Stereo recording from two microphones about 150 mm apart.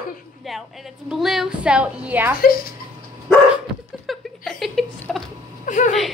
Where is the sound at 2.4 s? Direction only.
80° left.